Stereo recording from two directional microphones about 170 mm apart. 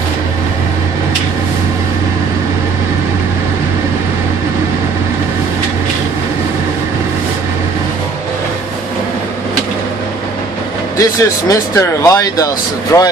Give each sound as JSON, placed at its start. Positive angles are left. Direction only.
{"t": 11.0, "sound": "speech", "side_deg": 20}